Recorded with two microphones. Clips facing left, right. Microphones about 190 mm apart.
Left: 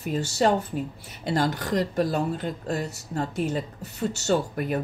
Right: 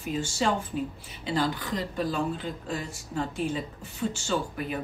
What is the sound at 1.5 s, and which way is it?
Speech, 75° left (ahead or behind).